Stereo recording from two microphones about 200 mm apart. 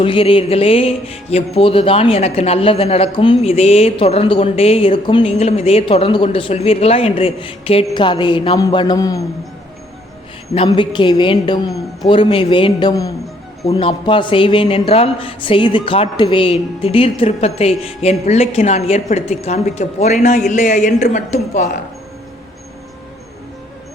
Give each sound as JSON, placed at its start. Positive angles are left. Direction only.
{"t": 0.0, "sound": "speech", "side_deg": 25}
{"t": 10.7, "sound": "speech", "side_deg": 25}